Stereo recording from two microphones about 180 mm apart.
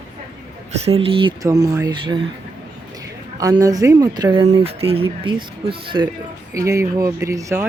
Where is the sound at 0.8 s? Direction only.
35° right (ahead or behind).